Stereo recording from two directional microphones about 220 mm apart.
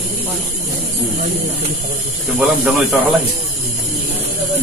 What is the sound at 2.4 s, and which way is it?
Speech, centre (ahead or behind).